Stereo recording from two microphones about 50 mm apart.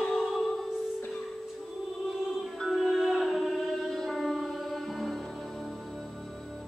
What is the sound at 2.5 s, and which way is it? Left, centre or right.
Music, centre.